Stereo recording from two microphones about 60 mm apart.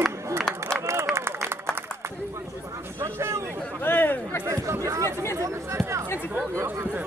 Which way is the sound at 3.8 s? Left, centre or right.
Left.